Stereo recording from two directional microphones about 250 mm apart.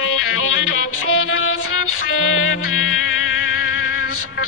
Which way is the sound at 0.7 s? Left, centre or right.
Left.